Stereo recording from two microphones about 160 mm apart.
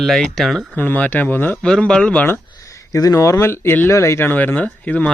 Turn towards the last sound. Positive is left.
turn(degrees=10)  # may be behind; listen again after turning